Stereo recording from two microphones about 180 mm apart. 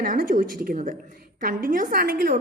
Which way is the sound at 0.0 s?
50° right (ahead or behind).